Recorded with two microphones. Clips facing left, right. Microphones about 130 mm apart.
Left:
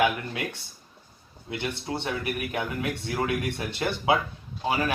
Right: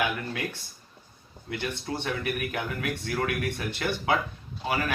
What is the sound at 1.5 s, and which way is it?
Speech, 15° left (ahead or behind).